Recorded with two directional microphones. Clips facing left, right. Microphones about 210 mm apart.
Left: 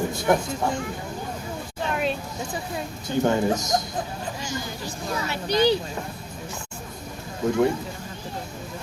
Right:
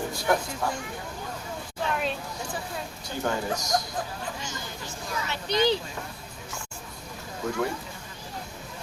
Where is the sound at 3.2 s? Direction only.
25° left (ahead or behind).